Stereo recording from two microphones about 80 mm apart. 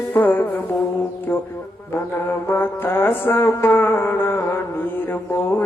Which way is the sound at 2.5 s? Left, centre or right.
Left.